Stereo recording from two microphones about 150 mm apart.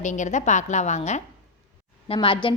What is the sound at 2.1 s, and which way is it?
Speech, 35° left (ahead or behind).